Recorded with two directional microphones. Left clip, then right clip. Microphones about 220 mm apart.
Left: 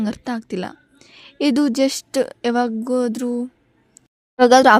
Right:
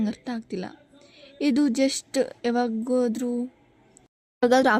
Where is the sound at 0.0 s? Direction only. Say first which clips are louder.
Left 5 dB; 45° left (ahead or behind).